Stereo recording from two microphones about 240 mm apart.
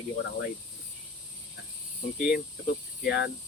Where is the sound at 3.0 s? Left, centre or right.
Left.